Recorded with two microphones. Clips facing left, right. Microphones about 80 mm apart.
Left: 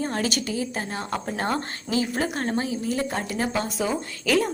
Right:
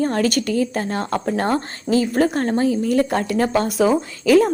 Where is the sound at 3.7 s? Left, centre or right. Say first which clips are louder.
Right 10 dB; right.